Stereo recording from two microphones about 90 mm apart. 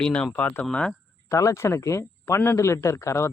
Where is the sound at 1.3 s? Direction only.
35° left (ahead or behind).